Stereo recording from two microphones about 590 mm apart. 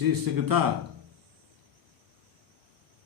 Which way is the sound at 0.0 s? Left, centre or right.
Right.